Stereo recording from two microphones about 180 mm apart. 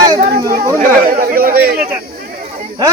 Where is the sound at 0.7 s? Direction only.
55° right (ahead or behind).